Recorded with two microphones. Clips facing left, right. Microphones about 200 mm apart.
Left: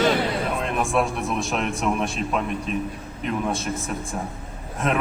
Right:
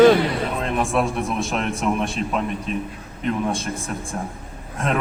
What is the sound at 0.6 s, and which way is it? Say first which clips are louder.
A man's voice: right 2 dB; centre (ahead or behind).